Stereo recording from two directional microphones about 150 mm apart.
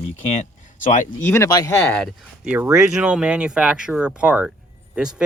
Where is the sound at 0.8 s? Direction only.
60° left (ahead or behind).